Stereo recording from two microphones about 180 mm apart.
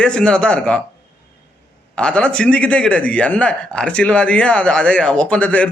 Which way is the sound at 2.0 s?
5° left (ahead or behind).